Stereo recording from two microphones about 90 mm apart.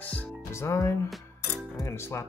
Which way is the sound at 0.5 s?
35° left (ahead or behind).